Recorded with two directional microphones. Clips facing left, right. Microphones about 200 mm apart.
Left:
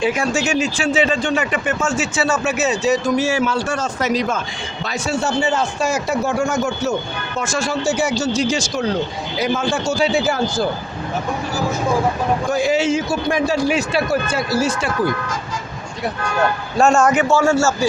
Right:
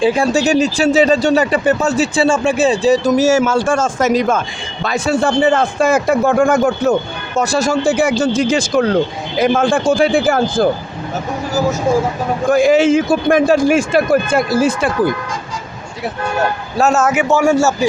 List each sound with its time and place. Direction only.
0.0 s speech: 30° right (ahead or behind)
3.1 s a man's voice: 45° right (ahead or behind)
7.3 s a man's voice: 40° right (ahead or behind)
12.5 s a man's voice: 50° right (ahead or behind)
16.7 s a man's voice: 5° right (ahead or behind)
17.2 s a man's voice: 15° right (ahead or behind)